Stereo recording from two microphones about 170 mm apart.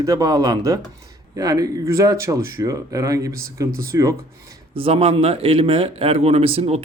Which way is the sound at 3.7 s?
60° right (ahead or behind).